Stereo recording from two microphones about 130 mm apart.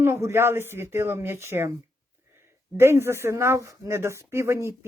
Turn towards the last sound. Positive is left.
turn(degrees=-20)  # may be behind; listen again after turning